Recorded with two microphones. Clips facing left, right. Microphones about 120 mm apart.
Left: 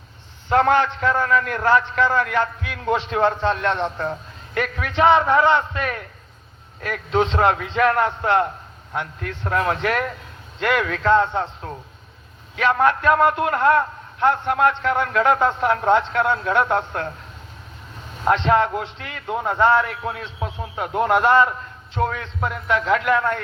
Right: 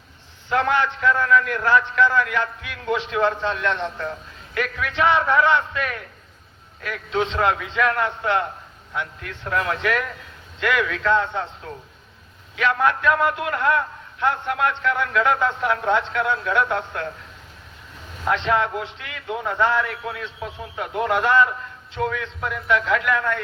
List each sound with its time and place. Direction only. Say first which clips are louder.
0.5 s a man's voice: left 4 dB; 40° left (ahead or behind)
12.5 s a man's voice: left 2 dB; 40° left (ahead or behind)
18.3 s a man's voice: left 4 dB; 35° left (ahead or behind)